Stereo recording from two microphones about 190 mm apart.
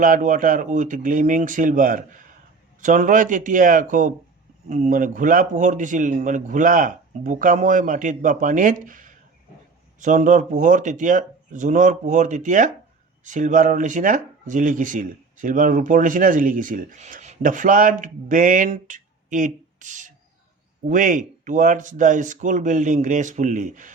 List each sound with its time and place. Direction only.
0.0 s speech: 45° right (ahead or behind)